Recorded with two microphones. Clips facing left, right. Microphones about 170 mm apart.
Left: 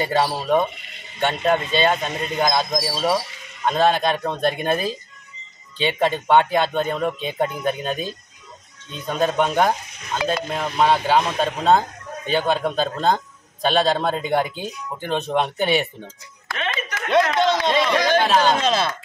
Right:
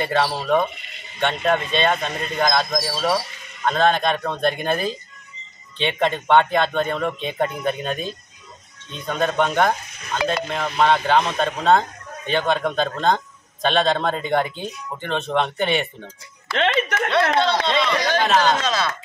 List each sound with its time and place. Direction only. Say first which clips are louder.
0.0 s a man's voice: left 1 dB; 10° left (ahead or behind)
17.6 s a man's voice: left 2 dB; 10° left (ahead or behind)
18.4 s speech: left 1 dB; 25° left (ahead or behind)